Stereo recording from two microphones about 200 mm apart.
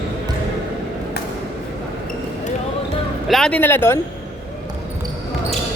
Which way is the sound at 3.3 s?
5° left (ahead or behind).